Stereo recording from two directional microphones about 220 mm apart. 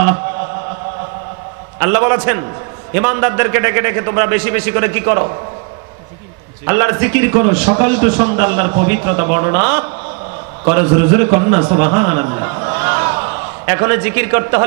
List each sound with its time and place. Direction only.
1.8 s a man's voice: 20° right (ahead or behind)
6.6 s a man's voice: 15° right (ahead or behind)